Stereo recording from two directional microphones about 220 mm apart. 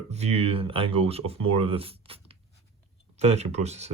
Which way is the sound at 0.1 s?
30° right (ahead or behind).